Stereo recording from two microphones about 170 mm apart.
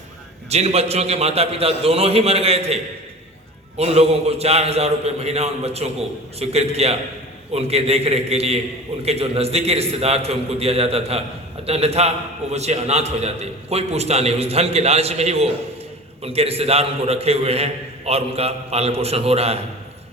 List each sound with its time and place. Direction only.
0.5 s a man's voice: 35° right (ahead or behind)
3.8 s a man's voice: 40° right (ahead or behind)